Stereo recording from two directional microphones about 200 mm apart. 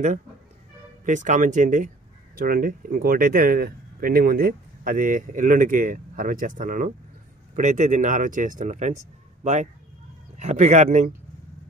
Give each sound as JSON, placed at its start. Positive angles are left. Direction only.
{"t": 1.0, "sound": "speech", "side_deg": -40}